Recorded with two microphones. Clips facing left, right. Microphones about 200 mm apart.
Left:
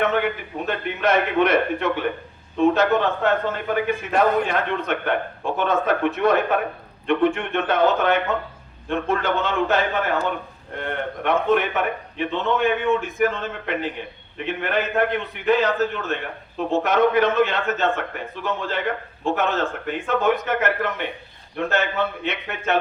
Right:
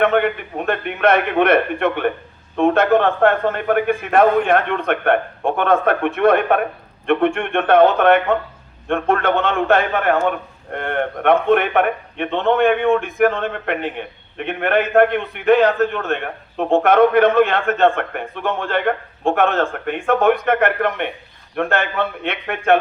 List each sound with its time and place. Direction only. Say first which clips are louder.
0.0 s a man's voice: right 5 dB; 60° right (ahead or behind)